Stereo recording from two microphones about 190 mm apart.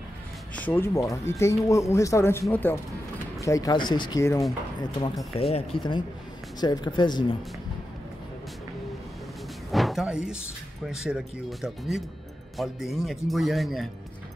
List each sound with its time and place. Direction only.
0.6 s speech: 10° left (ahead or behind)
5.3 s speech: 30° left (ahead or behind)
9.7 s a sound: centre (ahead or behind)
10.9 s speech: 5° right (ahead or behind)